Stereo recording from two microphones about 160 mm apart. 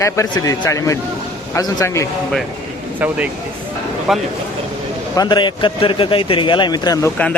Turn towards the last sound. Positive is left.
turn(degrees=25)  # may be behind; listen again after turning